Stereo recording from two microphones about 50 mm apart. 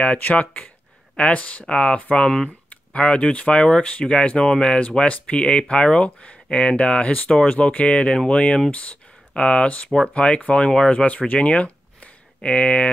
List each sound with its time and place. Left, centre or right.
0.2 s speech: left; by 2.5 s centre
2.9 s speech: left